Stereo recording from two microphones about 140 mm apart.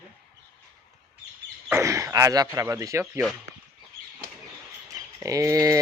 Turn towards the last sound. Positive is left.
turn(degrees=-25)  # may be behind; listen again after turning